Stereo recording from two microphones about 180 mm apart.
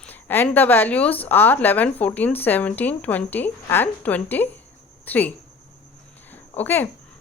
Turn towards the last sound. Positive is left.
turn(degrees=10)  # may be behind; listen again after turning